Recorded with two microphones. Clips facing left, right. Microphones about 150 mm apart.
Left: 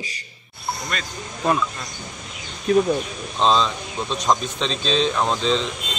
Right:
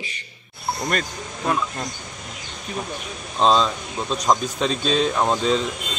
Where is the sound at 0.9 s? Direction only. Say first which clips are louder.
Right 5 dB; 50° right (ahead or behind).